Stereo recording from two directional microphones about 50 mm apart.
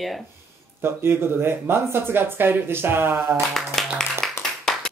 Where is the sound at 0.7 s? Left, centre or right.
Right.